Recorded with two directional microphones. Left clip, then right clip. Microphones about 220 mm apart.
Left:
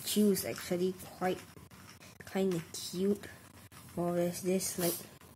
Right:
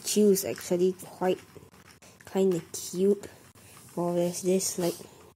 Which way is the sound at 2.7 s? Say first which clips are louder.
Right 8 dB; 15° right (ahead or behind).